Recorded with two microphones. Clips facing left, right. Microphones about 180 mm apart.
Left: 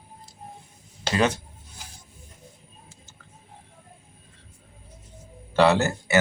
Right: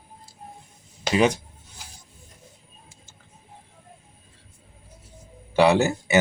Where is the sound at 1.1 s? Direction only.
15° right (ahead or behind).